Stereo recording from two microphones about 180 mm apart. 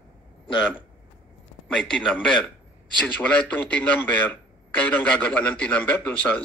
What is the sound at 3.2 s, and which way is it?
A man's voice, 10° left (ahead or behind).